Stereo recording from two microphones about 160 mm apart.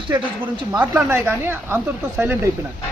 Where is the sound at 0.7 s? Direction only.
15° right (ahead or behind).